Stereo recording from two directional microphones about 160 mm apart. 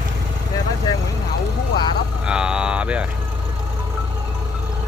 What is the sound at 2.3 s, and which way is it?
Speech, 5° right (ahead or behind).